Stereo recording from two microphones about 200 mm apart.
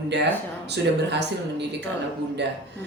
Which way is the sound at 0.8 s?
60° right (ahead or behind).